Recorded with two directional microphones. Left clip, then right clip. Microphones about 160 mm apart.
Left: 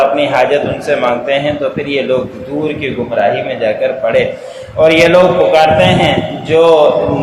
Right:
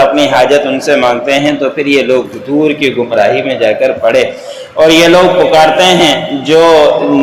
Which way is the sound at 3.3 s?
35° right (ahead or behind).